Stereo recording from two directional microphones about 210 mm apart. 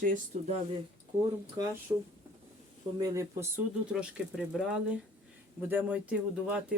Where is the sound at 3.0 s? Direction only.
15° right (ahead or behind).